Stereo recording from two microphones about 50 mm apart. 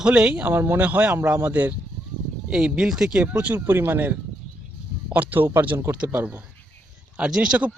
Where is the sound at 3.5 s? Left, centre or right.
Right.